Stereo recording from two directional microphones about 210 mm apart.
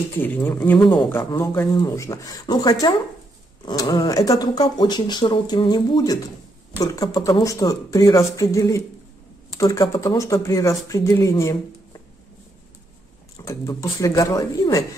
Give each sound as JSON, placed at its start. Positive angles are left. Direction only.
{"t": 0.2, "sound": "speech", "side_deg": 10}
{"t": 13.5, "sound": "speech", "side_deg": 15}